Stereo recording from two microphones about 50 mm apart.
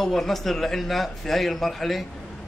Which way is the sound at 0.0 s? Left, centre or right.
Centre.